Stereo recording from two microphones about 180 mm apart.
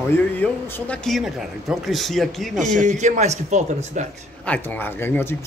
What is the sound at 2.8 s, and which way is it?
Speech, 40° right (ahead or behind).